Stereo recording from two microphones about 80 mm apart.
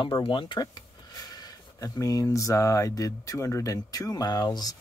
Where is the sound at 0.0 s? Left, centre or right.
Left.